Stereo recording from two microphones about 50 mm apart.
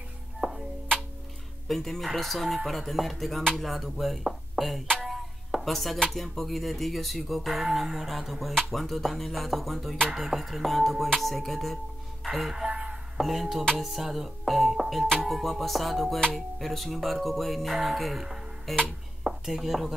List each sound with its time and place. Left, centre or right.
0.4 s music: centre
1.7 s speech: centre
4.6 s music: centre
5.0 s chopping: centre
6.0 s speech: centre
12.6 s a sound: right
13.2 s speech: centre
19.2 s chopping: centre